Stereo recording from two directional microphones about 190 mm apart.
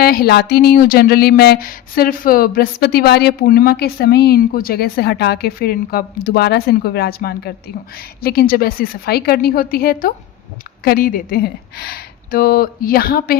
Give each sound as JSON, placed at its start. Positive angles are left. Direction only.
{"t": 0.0, "sound": "speech", "side_deg": 50}